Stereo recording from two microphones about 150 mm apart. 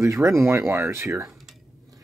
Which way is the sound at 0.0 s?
20° right (ahead or behind).